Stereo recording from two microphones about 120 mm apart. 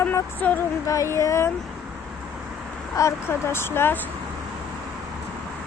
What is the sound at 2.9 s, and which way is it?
Speech, 25° left (ahead or behind).